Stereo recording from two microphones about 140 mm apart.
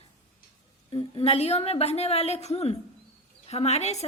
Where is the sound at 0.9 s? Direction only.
40° left (ahead or behind).